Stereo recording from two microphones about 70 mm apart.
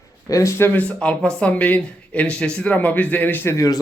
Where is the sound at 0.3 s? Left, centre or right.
Left.